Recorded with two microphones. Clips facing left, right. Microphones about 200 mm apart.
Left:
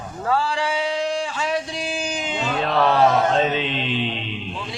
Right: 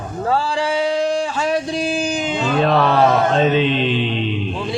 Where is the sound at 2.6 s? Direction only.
60° right (ahead or behind).